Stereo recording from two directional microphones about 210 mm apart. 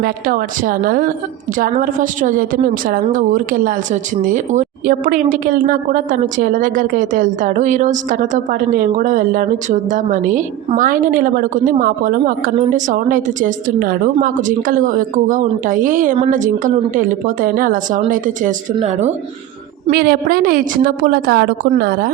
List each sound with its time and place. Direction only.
0.0 s a woman's voice: 45° right (ahead or behind)
19.9 s a woman's voice: 45° right (ahead or behind)